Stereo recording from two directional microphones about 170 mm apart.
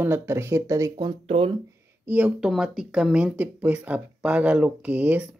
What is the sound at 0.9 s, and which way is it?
Speech, 30° right (ahead or behind).